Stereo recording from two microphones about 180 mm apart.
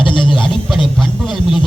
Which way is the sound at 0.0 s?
25° left (ahead or behind).